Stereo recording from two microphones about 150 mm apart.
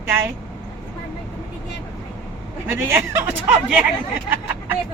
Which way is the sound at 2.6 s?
15° right (ahead or behind).